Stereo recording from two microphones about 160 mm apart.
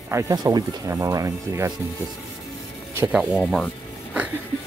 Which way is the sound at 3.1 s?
5° right (ahead or behind).